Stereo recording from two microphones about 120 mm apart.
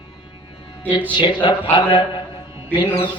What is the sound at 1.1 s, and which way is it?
Speech, 40° left (ahead or behind).